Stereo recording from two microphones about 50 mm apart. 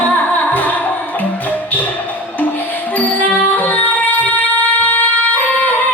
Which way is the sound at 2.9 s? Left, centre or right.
Left.